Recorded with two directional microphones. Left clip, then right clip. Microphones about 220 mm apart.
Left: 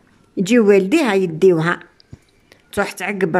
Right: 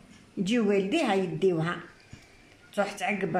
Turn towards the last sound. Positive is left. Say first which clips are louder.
# left 9 dB
turn(degrees=45)  # may be behind; listen again after turning